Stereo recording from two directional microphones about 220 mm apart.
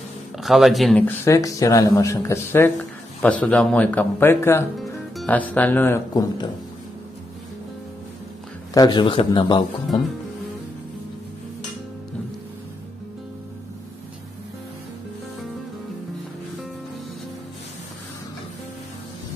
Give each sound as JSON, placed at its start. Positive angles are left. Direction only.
{"t": 0.4, "sound": "speech", "side_deg": 0}
{"t": 8.7, "sound": "a man's voice", "side_deg": 20}